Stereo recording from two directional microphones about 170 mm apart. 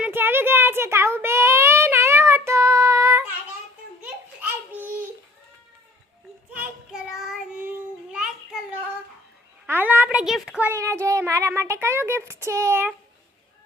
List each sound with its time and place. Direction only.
0.0 s child singing: 10° right (ahead or behind)
6.5 s child singing: 10° right (ahead or behind)
9.6 s a sound: 10° right (ahead or behind)
10.7 s child singing: 15° right (ahead or behind)
11.0 s speech: 15° right (ahead or behind)